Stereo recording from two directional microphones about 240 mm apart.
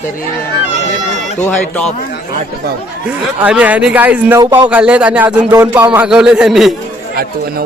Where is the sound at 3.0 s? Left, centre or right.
Centre.